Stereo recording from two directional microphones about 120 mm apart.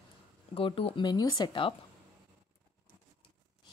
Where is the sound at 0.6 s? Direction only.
50° left (ahead or behind).